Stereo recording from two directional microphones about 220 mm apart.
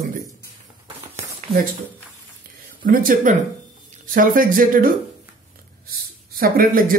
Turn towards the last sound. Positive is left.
turn(degrees=-40)  # may be behind; listen again after turning